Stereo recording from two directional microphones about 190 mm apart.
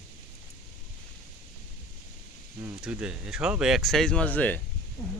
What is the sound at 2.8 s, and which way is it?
Speech, 5° right (ahead or behind).